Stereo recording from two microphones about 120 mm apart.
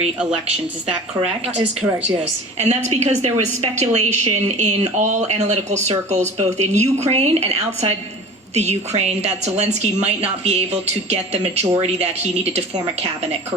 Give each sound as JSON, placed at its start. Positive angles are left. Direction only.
{"t": 2.2, "sound": "a woman's voice", "side_deg": -65}